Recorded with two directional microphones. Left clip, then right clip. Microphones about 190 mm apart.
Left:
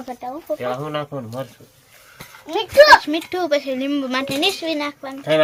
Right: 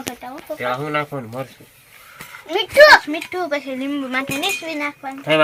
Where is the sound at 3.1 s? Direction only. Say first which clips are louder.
Left 3 dB; 65° left (ahead or behind).